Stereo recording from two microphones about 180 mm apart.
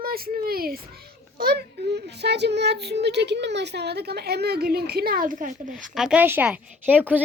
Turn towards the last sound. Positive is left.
turn(degrees=-10)  # may be behind; listen again after turning